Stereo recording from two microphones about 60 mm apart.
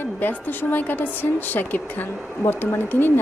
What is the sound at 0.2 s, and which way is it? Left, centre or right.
Speech, left.